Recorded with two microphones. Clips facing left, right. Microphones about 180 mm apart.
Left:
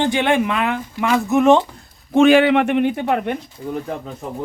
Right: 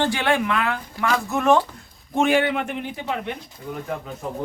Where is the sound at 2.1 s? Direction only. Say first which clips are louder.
Left 8 dB; 90° left; by 3.3 s 60° left (ahead or behind).